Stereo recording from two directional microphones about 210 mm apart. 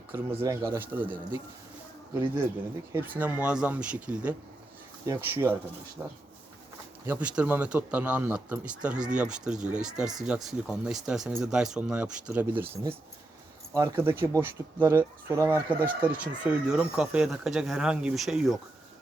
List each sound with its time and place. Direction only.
0.1 s speech: 10° right (ahead or behind)
3.2 s speech: 5° right (ahead or behind)
12.6 s speech: 25° right (ahead or behind)
13.7 s speech: 10° right (ahead or behind)